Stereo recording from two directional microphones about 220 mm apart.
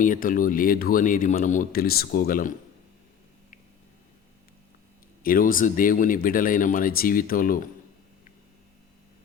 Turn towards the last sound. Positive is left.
turn(degrees=40)  # may be behind; listen again after turning